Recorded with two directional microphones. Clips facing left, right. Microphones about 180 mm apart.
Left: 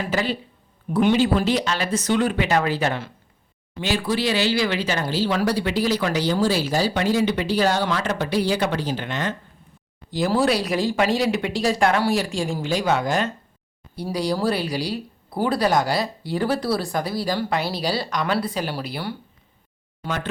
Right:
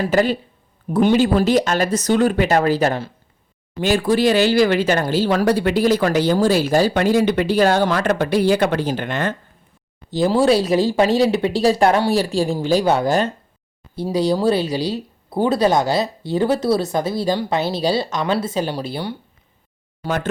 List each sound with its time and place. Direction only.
0.0 s speech: 45° right (ahead or behind)
10.1 s a woman's voice: 25° right (ahead or behind)
13.9 s speech: 25° right (ahead or behind)